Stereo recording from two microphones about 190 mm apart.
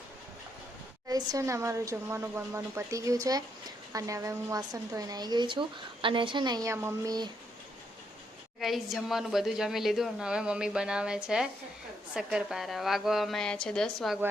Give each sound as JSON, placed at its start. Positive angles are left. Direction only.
{"t": 1.0, "sound": "a woman's voice", "side_deg": -20}
{"t": 8.6, "sound": "a woman's voice", "side_deg": 0}